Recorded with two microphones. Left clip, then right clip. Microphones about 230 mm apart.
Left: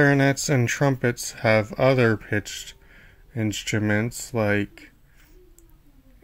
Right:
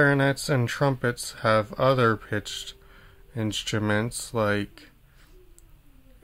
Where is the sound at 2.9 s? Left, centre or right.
Centre.